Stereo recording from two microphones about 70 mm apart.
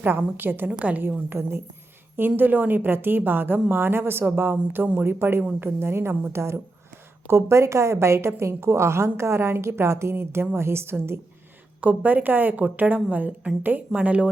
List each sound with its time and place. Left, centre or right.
0.0 s a woman's voice: right
0.7 s a woman's voice: centre
1.3 s a woman's voice: right
11.8 s a woman's voice: right